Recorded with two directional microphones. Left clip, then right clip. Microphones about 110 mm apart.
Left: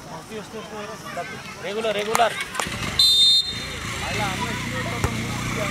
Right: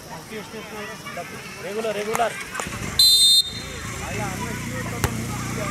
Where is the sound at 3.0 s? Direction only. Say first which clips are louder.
Right 1 dB; 10° right (ahead or behind).